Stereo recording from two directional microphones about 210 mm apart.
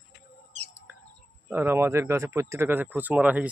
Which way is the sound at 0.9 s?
5° right (ahead or behind).